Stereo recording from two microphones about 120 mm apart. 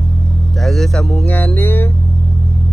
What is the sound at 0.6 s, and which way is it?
Speech, centre (ahead or behind).